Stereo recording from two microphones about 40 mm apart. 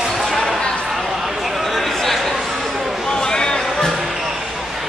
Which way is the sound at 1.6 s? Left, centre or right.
Centre.